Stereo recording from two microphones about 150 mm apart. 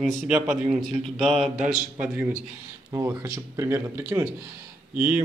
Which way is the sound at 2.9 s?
20° right (ahead or behind).